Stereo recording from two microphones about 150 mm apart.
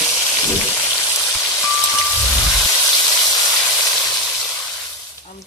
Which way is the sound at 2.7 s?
20° left (ahead or behind).